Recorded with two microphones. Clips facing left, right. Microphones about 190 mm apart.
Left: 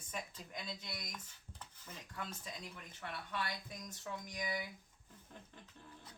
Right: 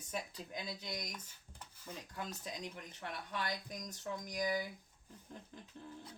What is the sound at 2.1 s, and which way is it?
Speech, 40° right (ahead or behind).